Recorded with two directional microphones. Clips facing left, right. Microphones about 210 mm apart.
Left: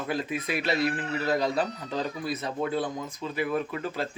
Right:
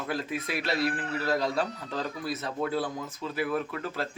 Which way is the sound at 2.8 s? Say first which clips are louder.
Left 1 dB; 20° left (ahead or behind).